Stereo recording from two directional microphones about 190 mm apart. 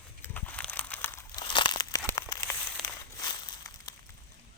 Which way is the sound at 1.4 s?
25° left (ahead or behind).